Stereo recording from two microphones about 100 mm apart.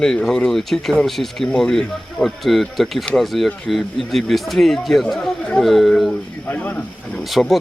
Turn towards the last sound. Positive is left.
turn(degrees=0)  # may be behind; listen again after turning